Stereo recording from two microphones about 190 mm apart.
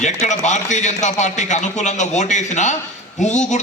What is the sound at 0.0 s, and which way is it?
A man's voice, 40° left (ahead or behind).